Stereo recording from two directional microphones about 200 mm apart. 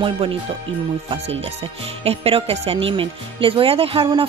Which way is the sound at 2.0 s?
30° right (ahead or behind).